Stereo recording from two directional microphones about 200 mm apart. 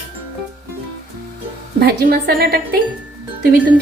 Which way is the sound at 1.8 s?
50° right (ahead or behind).